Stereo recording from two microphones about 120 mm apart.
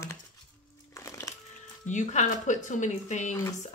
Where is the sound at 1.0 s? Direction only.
25° left (ahead or behind).